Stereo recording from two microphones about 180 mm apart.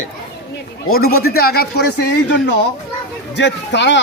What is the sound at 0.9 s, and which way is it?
Speech, 55° left (ahead or behind).